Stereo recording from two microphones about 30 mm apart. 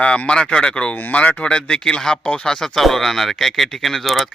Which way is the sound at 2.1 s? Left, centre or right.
Left.